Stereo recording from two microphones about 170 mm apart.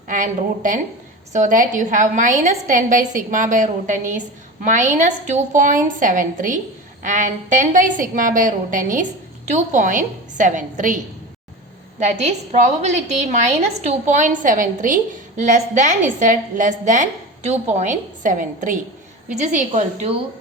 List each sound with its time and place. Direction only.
0.1 s a woman's voice: 50° right (ahead or behind)
11.9 s a woman's voice: 40° right (ahead or behind)